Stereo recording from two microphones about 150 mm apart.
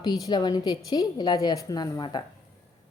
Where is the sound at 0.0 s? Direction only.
25° left (ahead or behind).